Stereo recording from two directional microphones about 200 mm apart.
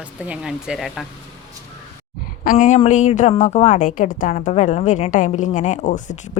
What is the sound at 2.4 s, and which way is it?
A woman's voice, 40° left (ahead or behind).